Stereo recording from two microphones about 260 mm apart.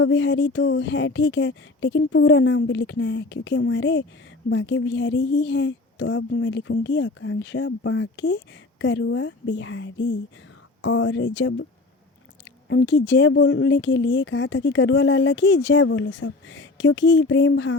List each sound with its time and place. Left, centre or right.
0.0 s speech: left
12.6 s speech: left